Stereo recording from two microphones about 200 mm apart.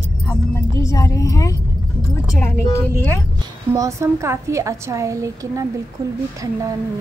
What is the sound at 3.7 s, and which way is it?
A woman's voice, 15° right (ahead or behind).